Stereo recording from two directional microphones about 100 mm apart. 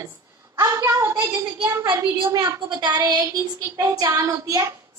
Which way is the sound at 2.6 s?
50° right (ahead or behind).